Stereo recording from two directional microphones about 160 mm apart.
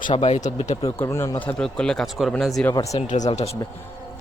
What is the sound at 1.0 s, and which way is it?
Speech, 15° left (ahead or behind).